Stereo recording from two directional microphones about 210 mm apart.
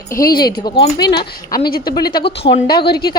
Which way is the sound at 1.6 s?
45° left (ahead or behind).